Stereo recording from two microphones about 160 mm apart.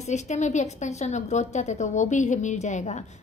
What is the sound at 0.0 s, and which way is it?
A woman's voice, 45° left (ahead or behind).